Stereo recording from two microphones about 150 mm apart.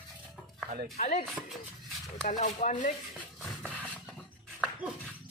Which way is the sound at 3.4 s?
5° left (ahead or behind).